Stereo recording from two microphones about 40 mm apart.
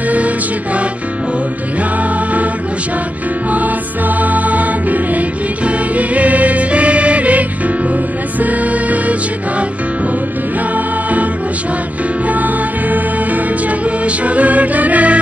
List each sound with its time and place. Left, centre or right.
4.2 s music: right
12.3 s music: right